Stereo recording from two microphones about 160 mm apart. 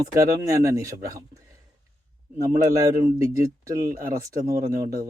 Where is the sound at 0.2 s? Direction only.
20° right (ahead or behind).